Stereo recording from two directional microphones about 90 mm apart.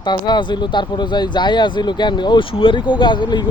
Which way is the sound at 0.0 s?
55° left (ahead or behind).